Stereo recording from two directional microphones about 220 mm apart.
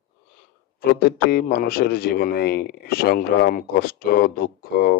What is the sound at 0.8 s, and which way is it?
Speech, 45° left (ahead or behind).